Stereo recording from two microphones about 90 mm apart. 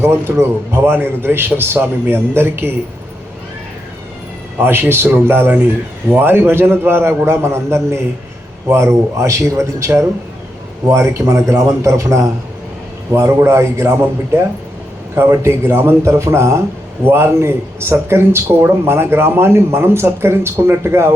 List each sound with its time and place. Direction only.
0.0 s a man's voice: 30° right (ahead or behind)
4.5 s a man's voice: 25° right (ahead or behind)